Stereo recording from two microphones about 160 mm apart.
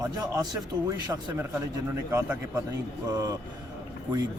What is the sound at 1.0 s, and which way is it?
A man's voice, 20° right (ahead or behind).